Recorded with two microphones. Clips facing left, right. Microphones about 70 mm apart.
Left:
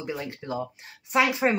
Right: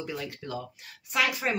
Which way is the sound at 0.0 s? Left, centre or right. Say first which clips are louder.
Left 3 dB; left.